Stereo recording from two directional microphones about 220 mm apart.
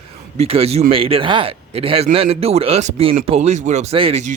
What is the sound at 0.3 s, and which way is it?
Speech, 25° right (ahead or behind).